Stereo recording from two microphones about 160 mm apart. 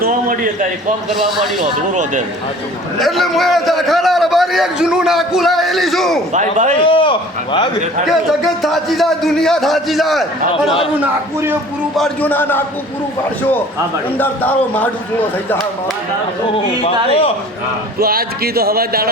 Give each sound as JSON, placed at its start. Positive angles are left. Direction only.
{"t": 1.9, "sound": "a man's voice", "side_deg": -50}
{"t": 3.0, "sound": "a man's voice", "side_deg": 0}
{"t": 6.3, "sound": "a man's voice", "side_deg": -50}
{"t": 6.7, "sound": "a man's voice", "side_deg": 30}
{"t": 8.0, "sound": "a man's voice", "side_deg": 0}
{"t": 10.5, "sound": "a man's voice", "side_deg": 35}
{"t": 11.0, "sound": "a man's voice", "side_deg": -15}
{"t": 11.9, "sound": "a man's voice", "side_deg": 5}
{"t": 14.2, "sound": "a man's voice", "side_deg": 10}
{"t": 16.8, "sound": "a man's voice", "side_deg": 35}
{"t": 18.0, "sound": "a man's voice", "side_deg": -70}